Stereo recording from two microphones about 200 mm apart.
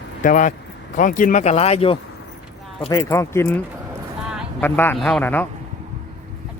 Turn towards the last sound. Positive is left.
turn(degrees=10)  # may be behind; listen again after turning